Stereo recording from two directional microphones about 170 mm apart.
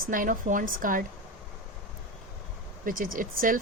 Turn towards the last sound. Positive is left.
turn(degrees=-55)  # may be behind; listen again after turning